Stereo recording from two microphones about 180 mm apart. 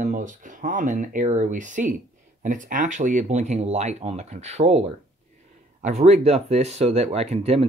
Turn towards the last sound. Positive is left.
turn(degrees=-35)  # may be behind; listen again after turning